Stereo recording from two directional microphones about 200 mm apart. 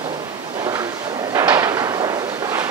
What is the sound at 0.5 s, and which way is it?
Drawer open or close, 20° right (ahead or behind).